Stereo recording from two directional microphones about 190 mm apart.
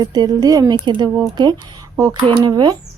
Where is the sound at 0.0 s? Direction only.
20° right (ahead or behind).